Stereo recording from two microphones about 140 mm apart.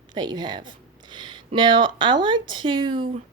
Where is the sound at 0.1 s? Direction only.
30° right (ahead or behind).